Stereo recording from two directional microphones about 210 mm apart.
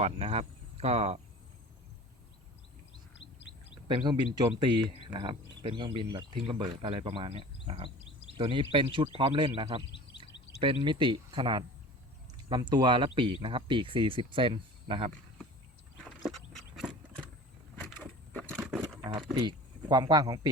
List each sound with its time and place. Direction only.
0.0 s speech: 30° right (ahead or behind)
3.8 s speech: 20° right (ahead or behind)
16.0 s horse: centre (ahead or behind)
17.7 s vehicle: 5° left (ahead or behind)
19.0 s speech: 20° right (ahead or behind)